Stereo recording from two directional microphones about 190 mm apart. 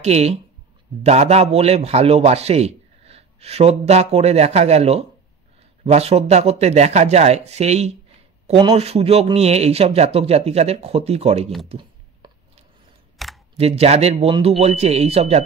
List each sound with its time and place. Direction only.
0.0 s speech: 35° right (ahead or behind)
11.7 s a sound: 30° right (ahead or behind)
13.2 s camera: centre (ahead or behind)
13.6 s speech: 35° right (ahead or behind)